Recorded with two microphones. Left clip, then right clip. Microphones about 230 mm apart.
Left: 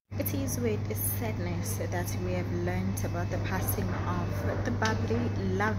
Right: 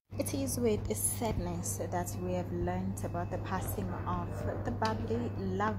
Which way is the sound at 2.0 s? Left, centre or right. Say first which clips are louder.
Left 1 dB; centre.